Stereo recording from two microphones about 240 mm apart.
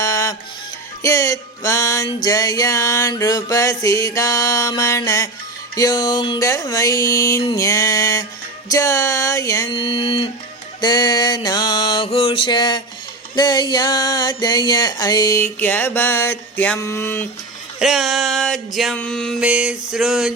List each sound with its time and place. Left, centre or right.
0.0 s music: centre
1.0 s a sound: centre
17.7 s mantra: centre